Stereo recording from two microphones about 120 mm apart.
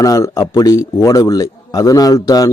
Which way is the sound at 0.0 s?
30° left (ahead or behind).